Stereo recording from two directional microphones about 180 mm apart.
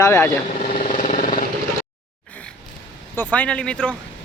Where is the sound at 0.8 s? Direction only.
45° left (ahead or behind).